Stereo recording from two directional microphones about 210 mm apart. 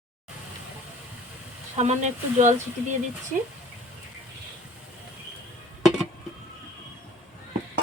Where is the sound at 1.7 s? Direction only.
30° right (ahead or behind).